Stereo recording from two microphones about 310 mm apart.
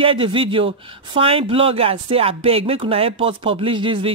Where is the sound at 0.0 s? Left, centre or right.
Centre.